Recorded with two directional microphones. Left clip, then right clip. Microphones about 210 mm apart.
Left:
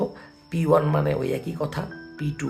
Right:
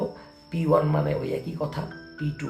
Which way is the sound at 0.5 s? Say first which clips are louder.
Left 2 dB; 50° left (ahead or behind).